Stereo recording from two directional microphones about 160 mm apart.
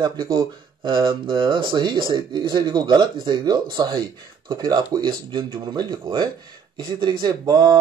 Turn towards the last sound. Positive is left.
turn(degrees=-25)  # may be behind; listen again after turning